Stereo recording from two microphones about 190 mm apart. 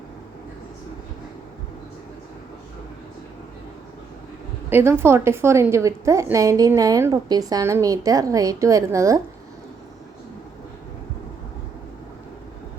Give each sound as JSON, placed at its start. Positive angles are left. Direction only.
{"t": 4.7, "sound": "a woman's voice", "side_deg": -10}